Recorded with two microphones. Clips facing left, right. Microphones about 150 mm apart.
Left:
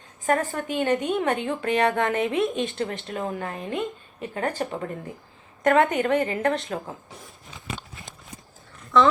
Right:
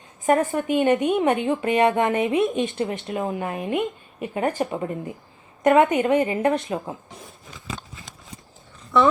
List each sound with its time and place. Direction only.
0.3 s speech: 20° right (ahead or behind)